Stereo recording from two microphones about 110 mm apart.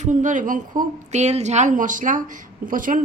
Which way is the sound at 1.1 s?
90° right.